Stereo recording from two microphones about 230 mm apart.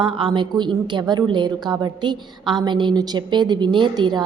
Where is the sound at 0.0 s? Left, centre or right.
Right.